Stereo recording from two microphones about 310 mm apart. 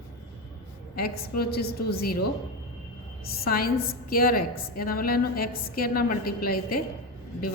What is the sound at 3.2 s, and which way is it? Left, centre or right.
A woman's voice, left.